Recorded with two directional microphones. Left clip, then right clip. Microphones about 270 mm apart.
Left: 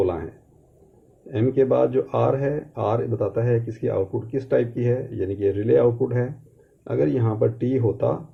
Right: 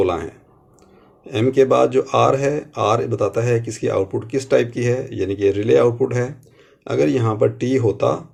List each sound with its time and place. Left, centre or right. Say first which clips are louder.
0.0 s speech: right 4 dB; centre
1.3 s speech: right 5 dB; centre